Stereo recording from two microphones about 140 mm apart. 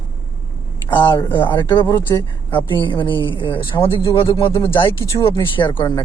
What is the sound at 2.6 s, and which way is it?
A woman's voice, 35° left (ahead or behind).